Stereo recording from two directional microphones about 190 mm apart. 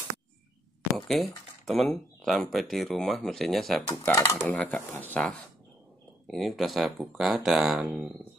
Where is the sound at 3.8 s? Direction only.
15° left (ahead or behind); by 8.1 s 5° right (ahead or behind).